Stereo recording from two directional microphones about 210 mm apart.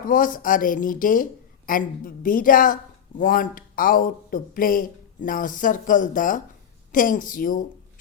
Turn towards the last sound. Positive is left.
turn(degrees=40)  # may be behind; listen again after turning